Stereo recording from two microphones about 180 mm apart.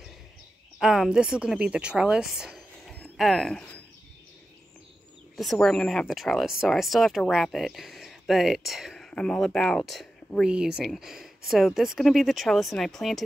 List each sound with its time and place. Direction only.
0.7 s speech: 5° right (ahead or behind)
5.3 s speech: centre (ahead or behind)